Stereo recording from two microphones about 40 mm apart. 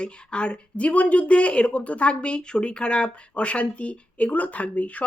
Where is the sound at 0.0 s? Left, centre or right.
Left.